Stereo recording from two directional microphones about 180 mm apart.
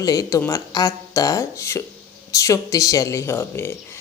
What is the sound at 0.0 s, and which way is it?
A woman's voice, 20° left (ahead or behind).